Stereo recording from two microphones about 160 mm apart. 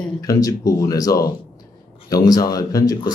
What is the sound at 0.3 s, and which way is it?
Speech, 20° left (ahead or behind).